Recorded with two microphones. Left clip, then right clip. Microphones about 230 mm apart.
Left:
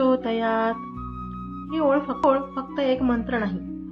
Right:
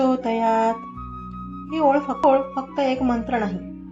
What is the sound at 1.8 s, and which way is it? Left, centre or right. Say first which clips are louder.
Music: right 3 dB; centre.